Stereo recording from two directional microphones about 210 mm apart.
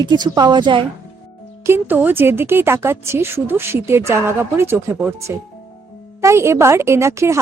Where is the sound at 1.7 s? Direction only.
10° right (ahead or behind).